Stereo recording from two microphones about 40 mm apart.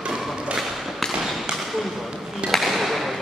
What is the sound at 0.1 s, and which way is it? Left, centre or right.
Thump, centre.